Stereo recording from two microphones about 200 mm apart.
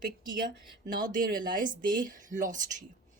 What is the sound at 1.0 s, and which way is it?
Speech, 45° right (ahead or behind).